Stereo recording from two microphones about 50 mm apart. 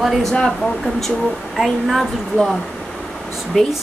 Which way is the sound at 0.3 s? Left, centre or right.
Centre.